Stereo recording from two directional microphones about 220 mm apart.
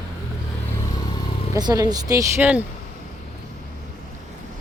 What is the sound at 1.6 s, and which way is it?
A woman's voice, 15° right (ahead or behind).